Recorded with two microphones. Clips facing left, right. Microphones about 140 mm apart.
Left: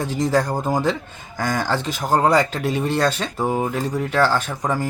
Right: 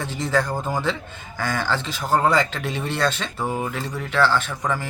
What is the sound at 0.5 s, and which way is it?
Speech, 15° left (ahead or behind).